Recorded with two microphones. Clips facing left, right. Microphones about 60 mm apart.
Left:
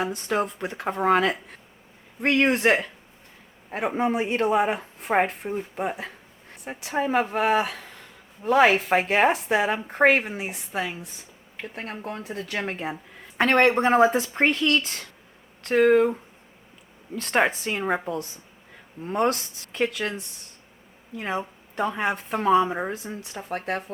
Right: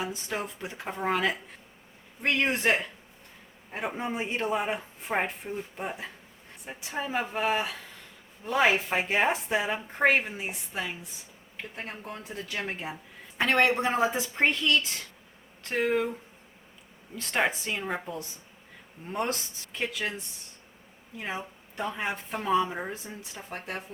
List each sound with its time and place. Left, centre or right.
0.0 s speech: left
2.2 s speech: left
17.2 s speech: left
21.2 s speech: left